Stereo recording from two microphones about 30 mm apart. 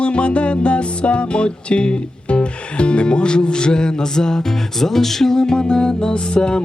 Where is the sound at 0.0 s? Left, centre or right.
Left.